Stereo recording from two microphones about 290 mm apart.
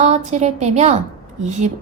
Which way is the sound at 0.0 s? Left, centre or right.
Right.